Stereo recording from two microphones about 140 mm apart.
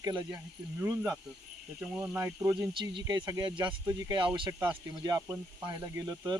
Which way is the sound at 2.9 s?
30° right (ahead or behind).